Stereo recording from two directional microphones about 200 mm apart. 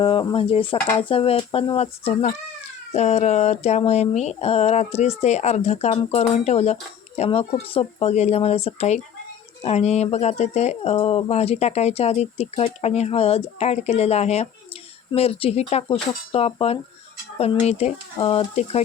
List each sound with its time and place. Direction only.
0.0 s speech: 25° left (ahead or behind)